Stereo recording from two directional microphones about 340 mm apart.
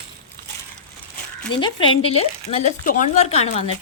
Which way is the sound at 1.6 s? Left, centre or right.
Centre.